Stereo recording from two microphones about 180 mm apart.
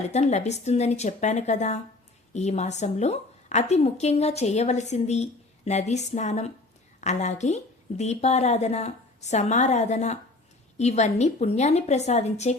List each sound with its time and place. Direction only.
0.1 s a woman's voice: 40° left (ahead or behind)